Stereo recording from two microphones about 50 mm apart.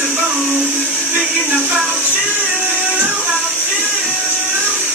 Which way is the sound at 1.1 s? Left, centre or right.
Right.